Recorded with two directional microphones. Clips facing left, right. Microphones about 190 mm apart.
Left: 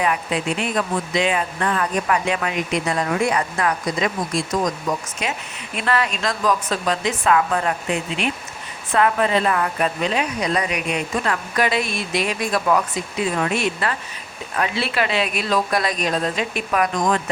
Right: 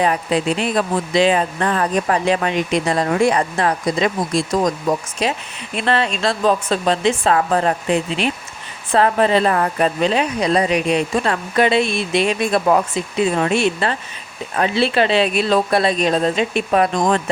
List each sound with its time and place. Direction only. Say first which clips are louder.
0.0 s speech: right 4 dB; 35° right (ahead or behind)